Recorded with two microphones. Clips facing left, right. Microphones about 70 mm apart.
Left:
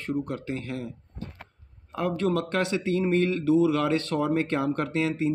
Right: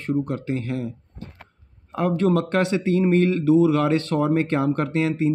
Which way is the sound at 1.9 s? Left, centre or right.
Right.